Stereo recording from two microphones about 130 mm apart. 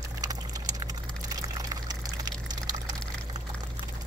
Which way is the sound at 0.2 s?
30° right (ahead or behind).